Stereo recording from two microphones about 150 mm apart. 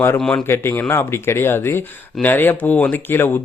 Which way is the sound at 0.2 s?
5° left (ahead or behind).